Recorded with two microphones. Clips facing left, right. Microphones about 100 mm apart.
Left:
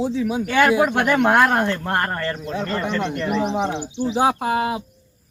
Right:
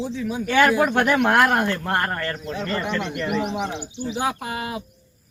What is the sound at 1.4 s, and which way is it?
Speech, 10° right (ahead or behind).